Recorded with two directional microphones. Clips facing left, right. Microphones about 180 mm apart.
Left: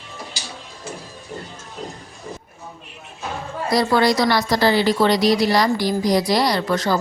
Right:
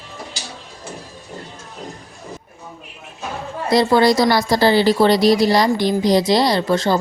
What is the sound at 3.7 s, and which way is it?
Speech, 25° right (ahead or behind).